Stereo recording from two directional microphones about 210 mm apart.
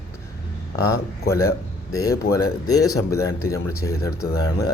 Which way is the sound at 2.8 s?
90° left.